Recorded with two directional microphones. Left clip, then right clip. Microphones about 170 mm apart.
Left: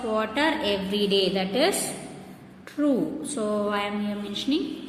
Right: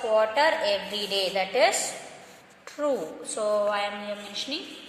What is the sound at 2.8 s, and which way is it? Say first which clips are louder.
A woman's voice: left 2 dB; 15° right (ahead or behind).